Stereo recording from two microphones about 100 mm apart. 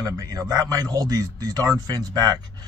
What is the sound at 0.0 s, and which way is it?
A man's voice, 35° right (ahead or behind).